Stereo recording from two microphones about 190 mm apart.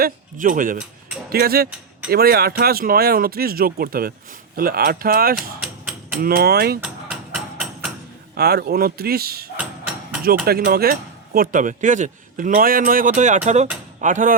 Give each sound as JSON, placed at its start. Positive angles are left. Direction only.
{"t": 0.0, "sound": "a man's voice", "side_deg": -45}
{"t": 5.4, "sound": "a sound", "side_deg": -5}
{"t": 6.2, "sound": "speech", "side_deg": -55}
{"t": 6.8, "sound": "music", "side_deg": -5}
{"t": 8.4, "sound": "speech", "side_deg": -55}
{"t": 9.6, "sound": "a sound", "side_deg": -5}
{"t": 10.4, "sound": "a man's voice", "side_deg": -55}